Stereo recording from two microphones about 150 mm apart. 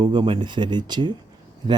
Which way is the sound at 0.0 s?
30° right (ahead or behind).